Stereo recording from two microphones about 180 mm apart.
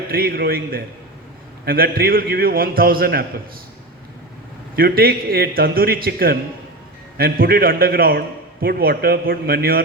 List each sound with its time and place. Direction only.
0.1 s a man's voice: 55° right (ahead or behind)
4.7 s a man's voice: 55° right (ahead or behind)